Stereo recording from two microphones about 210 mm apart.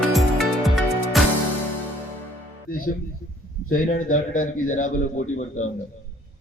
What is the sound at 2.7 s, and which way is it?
Music, 40° left (ahead or behind).